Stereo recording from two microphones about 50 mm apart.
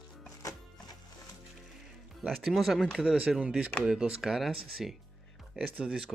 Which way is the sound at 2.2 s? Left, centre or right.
Centre.